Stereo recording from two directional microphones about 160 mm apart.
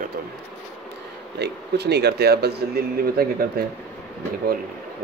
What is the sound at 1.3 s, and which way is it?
Speech, 90° right.